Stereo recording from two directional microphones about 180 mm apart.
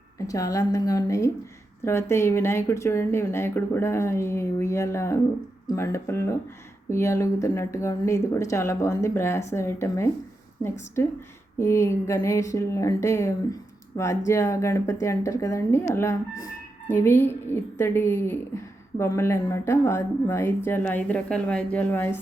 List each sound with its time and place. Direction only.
0.3 s a woman's voice: 20° left (ahead or behind)